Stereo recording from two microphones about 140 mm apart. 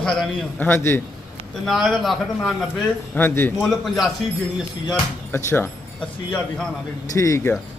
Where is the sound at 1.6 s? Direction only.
Centre (ahead or behind).